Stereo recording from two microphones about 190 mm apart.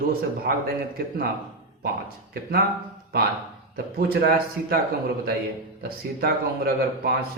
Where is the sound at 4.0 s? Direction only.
55° right (ahead or behind).